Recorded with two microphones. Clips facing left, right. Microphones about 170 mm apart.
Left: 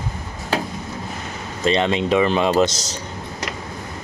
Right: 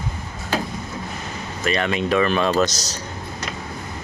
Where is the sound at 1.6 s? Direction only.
25° left (ahead or behind).